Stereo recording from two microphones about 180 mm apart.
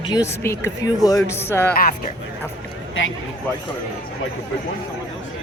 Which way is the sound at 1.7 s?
55° left (ahead or behind).